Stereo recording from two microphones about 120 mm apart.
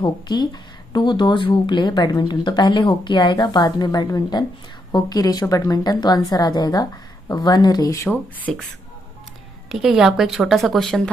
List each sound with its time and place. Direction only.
0.0 s speech: 35° left (ahead or behind)
8.1 s speech: 15° left (ahead or behind)
9.7 s a woman's voice: 5° right (ahead or behind)